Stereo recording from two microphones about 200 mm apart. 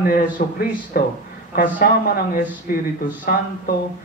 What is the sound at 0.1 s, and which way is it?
A man's voice, 50° left (ahead or behind).